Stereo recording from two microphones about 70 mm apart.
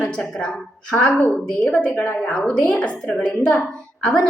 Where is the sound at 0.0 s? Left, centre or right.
Centre.